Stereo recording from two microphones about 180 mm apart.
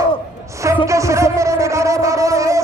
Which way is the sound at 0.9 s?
15° right (ahead or behind).